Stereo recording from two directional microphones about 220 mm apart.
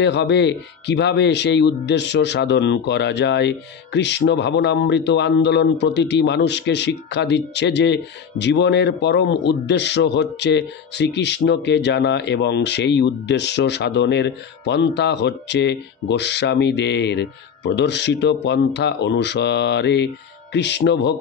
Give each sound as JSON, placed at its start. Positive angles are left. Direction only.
{"t": 0.0, "sound": "speech", "side_deg": 50}